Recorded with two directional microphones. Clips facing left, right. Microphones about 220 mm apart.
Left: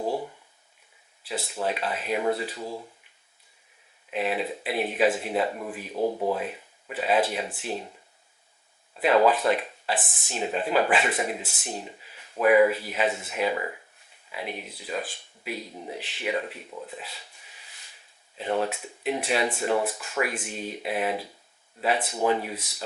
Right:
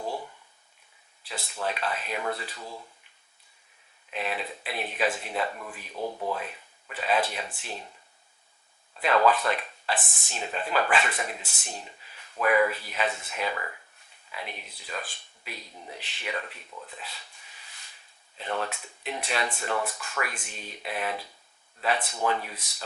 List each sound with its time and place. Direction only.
0.0 s a sound: 30° left (ahead or behind)
1.2 s speech: 5° left (ahead or behind)
4.1 s speech: 10° left (ahead or behind)
9.0 s speech: 10° left (ahead or behind)
16.8 s a sound: 10° left (ahead or behind)
18.3 s speech: 10° left (ahead or behind)